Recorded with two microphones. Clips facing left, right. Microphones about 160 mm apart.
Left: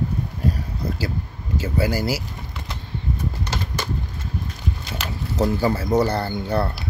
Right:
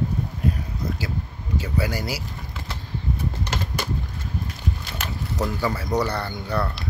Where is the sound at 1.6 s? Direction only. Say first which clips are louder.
Left 5 dB; 30° left (ahead or behind).